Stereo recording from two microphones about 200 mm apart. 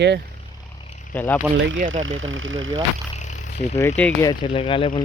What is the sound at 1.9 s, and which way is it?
Speech, 75° right (ahead or behind).